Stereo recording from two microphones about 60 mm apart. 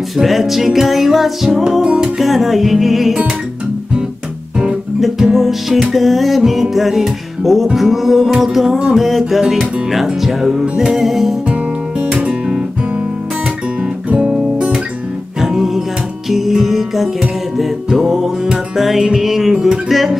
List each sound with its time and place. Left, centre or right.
0.2 s music: centre
4.6 s music: centre
12.1 s music: centre
14.0 s music: centre